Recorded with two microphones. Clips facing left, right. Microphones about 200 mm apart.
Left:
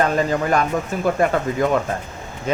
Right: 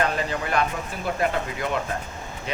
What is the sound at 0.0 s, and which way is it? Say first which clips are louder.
Speech: left 6 dB; 45° left (ahead or behind).